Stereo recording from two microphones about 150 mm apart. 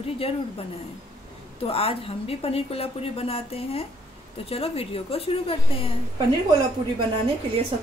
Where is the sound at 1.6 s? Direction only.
40° left (ahead or behind).